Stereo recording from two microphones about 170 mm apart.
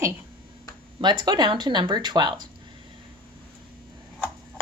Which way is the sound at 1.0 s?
25° right (ahead or behind).